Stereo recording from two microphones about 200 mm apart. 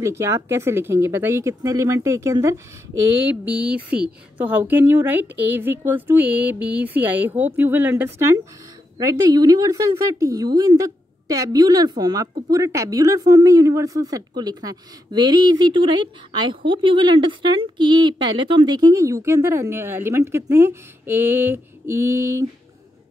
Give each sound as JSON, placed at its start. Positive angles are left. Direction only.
{"t": 0.0, "sound": "a woman's voice", "side_deg": -15}